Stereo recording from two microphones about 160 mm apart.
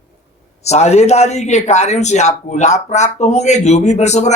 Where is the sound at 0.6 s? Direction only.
45° left (ahead or behind).